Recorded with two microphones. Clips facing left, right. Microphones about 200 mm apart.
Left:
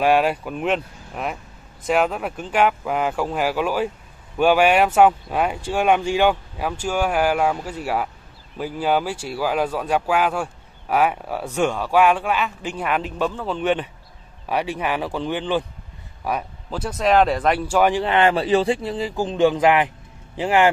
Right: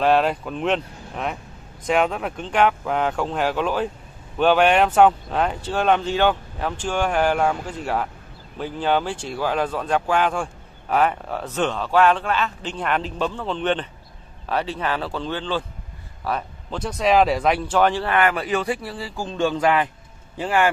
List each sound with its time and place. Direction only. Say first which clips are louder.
0.0 s speech: left 1 dB; 10° left (ahead or behind)